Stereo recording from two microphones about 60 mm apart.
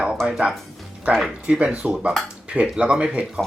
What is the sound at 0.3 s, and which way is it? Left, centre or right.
Speech, centre.